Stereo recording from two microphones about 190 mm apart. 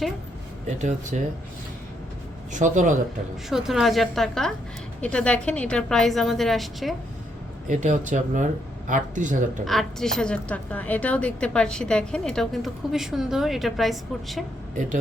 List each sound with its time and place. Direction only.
0.8 s speech: 40° right (ahead or behind)
2.5 s speech: 40° right (ahead or behind)
3.5 s a woman's voice: centre (ahead or behind)
7.7 s speech: 40° right (ahead or behind)
9.6 s a woman's voice: centre (ahead or behind)